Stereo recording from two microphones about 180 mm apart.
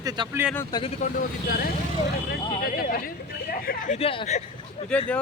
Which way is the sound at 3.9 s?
30° left (ahead or behind).